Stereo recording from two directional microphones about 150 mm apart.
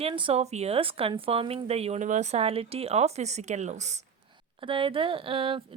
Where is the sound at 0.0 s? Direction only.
35° right (ahead or behind).